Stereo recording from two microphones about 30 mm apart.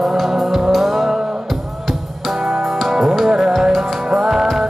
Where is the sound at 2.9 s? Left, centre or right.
Centre.